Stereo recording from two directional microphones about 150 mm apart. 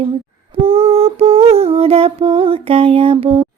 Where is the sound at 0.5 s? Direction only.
40° right (ahead or behind).